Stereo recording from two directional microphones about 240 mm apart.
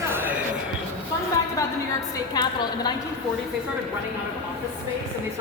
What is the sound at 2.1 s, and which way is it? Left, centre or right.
Speech, centre.